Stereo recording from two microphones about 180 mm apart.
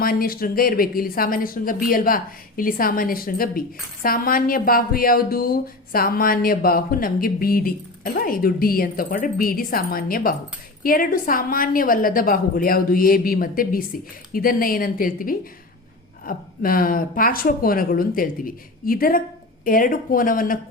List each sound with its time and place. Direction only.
0.0 s speech: 55° left (ahead or behind)